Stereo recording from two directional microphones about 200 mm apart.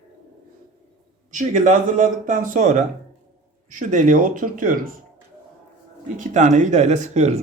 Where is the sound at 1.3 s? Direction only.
40° right (ahead or behind).